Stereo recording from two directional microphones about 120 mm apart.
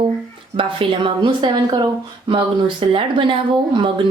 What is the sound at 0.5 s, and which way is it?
Speech, 45° right (ahead or behind).